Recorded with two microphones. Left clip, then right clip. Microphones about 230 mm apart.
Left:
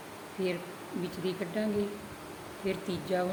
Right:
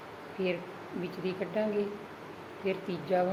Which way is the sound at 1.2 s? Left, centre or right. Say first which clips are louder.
Right 2 dB; left.